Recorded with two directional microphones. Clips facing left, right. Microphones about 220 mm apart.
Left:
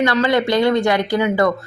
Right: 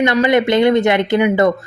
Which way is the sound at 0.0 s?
20° right (ahead or behind).